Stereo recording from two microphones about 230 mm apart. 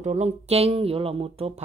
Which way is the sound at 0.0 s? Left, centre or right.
Right.